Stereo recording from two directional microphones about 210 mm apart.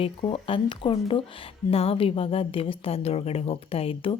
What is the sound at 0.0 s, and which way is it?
A woman's voice, 25° left (ahead or behind).